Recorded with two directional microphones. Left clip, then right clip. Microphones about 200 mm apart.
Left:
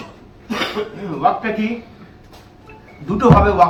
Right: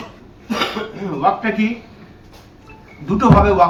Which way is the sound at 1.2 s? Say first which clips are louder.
Even; 30° right (ahead or behind).